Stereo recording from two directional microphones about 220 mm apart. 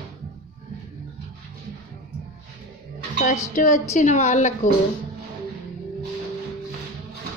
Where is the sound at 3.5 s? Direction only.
35° left (ahead or behind).